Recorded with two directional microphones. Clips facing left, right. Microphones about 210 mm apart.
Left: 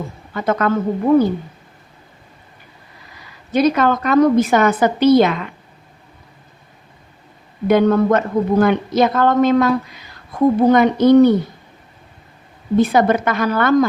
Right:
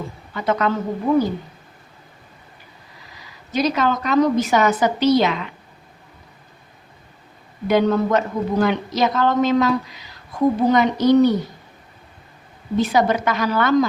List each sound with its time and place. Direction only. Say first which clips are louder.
0.3 s a woman's voice: left 2 dB; 50° left (ahead or behind)
3.5 s a woman's voice: left 5 dB; 55° left (ahead or behind)
7.7 s a woman's voice: left 4 dB; 55° left (ahead or behind)
12.7 s a woman's voice: left 4 dB; 55° left (ahead or behind)